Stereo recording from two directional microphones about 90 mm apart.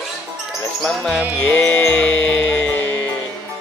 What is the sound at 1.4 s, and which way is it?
Music, 10° left (ahead or behind).